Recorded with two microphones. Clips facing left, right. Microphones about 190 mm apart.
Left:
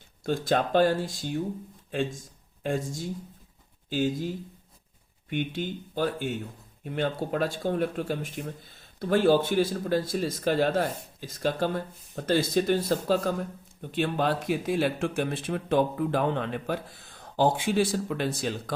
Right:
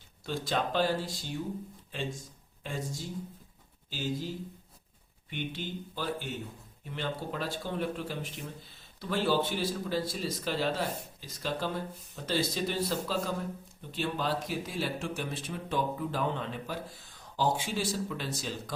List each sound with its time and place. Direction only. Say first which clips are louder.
0.3 s speech: left 7 dB; 50° left (ahead or behind)
2.6 s speech: left 8 dB; 50° left (ahead or behind)
5.3 s speech: left 7 dB; 55° left (ahead or behind)